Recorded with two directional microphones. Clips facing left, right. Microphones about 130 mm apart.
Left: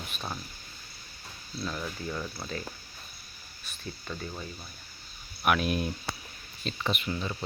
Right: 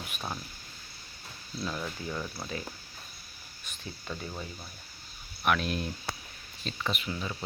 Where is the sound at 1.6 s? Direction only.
5° right (ahead or behind).